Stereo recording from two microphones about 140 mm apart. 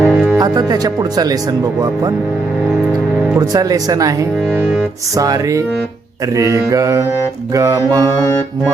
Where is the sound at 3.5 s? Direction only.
25° right (ahead or behind).